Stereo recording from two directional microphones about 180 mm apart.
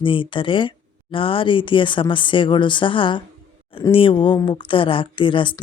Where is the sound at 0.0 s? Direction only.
30° left (ahead or behind).